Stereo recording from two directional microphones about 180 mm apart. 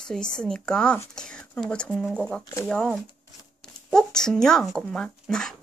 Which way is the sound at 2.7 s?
5° left (ahead or behind).